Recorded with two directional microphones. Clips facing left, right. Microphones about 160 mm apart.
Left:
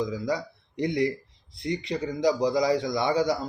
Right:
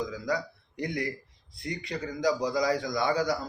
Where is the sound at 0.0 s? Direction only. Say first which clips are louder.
Left 3 dB; 25° left (ahead or behind).